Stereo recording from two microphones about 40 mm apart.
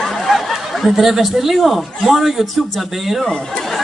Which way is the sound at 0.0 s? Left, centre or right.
Centre.